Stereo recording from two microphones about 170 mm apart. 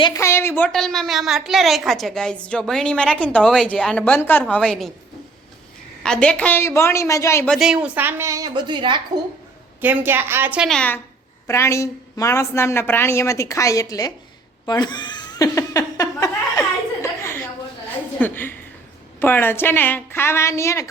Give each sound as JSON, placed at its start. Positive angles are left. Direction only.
{"t": 0.0, "sound": "a woman's voice", "side_deg": 20}
{"t": 0.7, "sound": "a woman's voice", "side_deg": 0}
{"t": 6.0, "sound": "a woman's voice", "side_deg": 5}
{"t": 7.4, "sound": "a woman's voice", "side_deg": 0}
{"t": 9.8, "sound": "a woman's voice", "side_deg": -10}
{"t": 10.7, "sound": "a woman's voice", "side_deg": 10}
{"t": 14.7, "sound": "chuckle", "side_deg": 25}
{"t": 18.2, "sound": "a woman's voice", "side_deg": 10}